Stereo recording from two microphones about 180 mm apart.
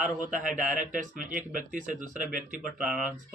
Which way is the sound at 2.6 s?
5° right (ahead or behind).